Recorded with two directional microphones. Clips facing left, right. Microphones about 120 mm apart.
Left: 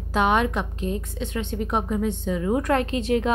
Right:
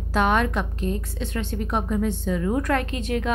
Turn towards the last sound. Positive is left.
turn(degrees=30)  # may be behind; listen again after turning